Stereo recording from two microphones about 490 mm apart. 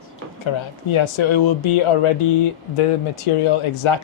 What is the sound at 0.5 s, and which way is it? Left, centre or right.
Speech, left.